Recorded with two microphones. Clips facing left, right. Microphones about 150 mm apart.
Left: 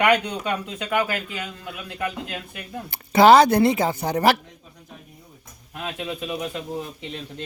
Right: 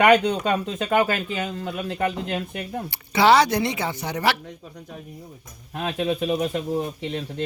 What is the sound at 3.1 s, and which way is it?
A woman's voice, 50° left (ahead or behind).